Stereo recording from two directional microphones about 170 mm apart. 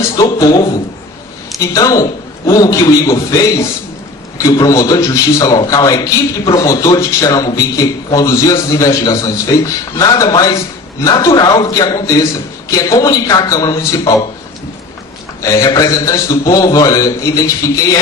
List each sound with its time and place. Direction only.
0.2 s a man's voice: 15° left (ahead or behind)
1.5 s a man's voice: 20° left (ahead or behind)
15.4 s a man's voice: 20° left (ahead or behind)